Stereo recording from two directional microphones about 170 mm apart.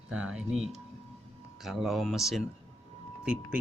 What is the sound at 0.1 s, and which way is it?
Music, 5° right (ahead or behind).